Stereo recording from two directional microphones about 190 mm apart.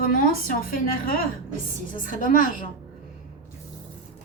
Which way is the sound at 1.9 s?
45° left (ahead or behind).